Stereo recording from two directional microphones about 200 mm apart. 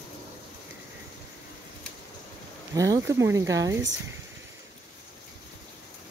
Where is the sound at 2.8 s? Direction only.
15° right (ahead or behind).